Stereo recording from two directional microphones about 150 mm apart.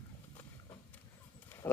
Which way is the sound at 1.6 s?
15° left (ahead or behind).